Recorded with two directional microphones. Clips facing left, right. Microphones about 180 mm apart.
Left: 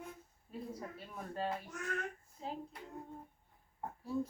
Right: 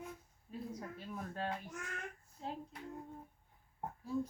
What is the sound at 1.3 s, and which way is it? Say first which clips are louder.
A woman's voice: left 4 dB; 5° left (ahead or behind).